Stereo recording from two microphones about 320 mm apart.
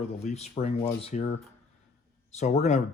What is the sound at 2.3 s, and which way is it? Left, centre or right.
Speech, left.